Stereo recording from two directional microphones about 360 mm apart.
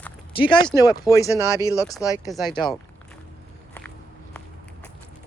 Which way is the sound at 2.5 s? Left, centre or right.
Centre.